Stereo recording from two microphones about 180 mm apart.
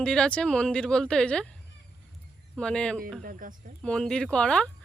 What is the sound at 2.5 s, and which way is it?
Speech, 5° left (ahead or behind).